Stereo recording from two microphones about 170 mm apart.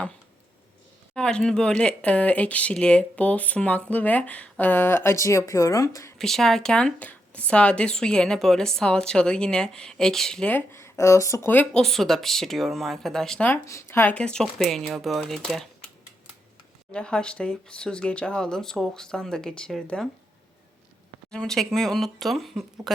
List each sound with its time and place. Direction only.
1.1 s speech: 5° left (ahead or behind)
6.1 s speech: centre (ahead or behind)
16.9 s speech: 5° left (ahead or behind)
21.2 s speech: 5° left (ahead or behind)